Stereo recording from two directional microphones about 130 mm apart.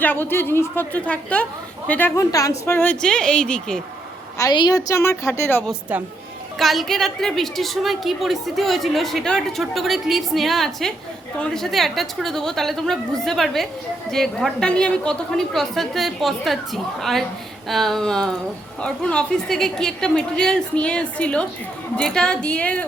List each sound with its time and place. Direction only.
0.0 s speech: 15° left (ahead or behind)
2.3 s speech: 25° left (ahead or behind); by 3.8 s 5° left (ahead or behind)
4.5 s a woman's voice: 30° left (ahead or behind)
5.9 s speech: 10° right (ahead or behind)
6.6 s a woman's voice: centre (ahead or behind)